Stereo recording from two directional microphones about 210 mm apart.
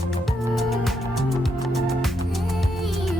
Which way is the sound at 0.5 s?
Centre (ahead or behind).